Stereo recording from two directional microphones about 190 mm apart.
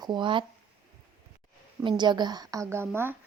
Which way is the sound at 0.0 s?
25° right (ahead or behind).